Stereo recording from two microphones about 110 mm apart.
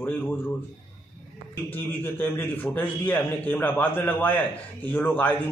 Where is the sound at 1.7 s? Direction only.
20° left (ahead or behind).